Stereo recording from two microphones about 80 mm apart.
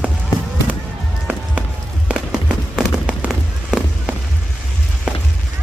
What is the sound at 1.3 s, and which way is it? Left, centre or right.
Music, centre.